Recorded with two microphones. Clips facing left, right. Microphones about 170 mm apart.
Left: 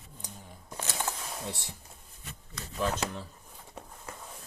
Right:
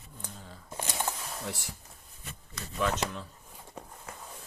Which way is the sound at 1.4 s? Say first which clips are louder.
Right 3 dB; 25° left (ahead or behind).